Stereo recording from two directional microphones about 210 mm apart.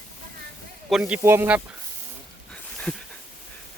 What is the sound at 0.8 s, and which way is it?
Speech, 5° right (ahead or behind).